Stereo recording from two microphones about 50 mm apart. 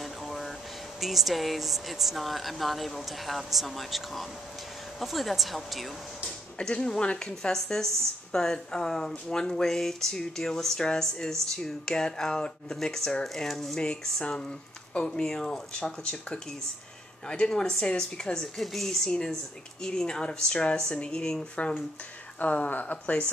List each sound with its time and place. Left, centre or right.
0.0 s air conditioning: centre
1.0 s speech: centre
6.6 s a woman's voice: centre
13.7 s a woman's voice: centre
22.4 s a woman's voice: left